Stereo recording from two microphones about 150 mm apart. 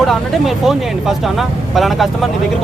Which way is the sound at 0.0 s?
Centre (ahead or behind).